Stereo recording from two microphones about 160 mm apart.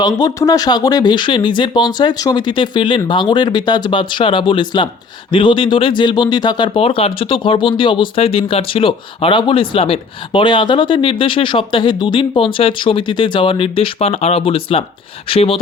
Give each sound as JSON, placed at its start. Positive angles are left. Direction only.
{"t": 0.0, "sound": "speech", "side_deg": 25}